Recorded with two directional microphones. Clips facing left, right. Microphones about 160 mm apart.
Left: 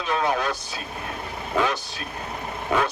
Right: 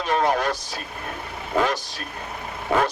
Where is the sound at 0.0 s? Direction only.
40° right (ahead or behind).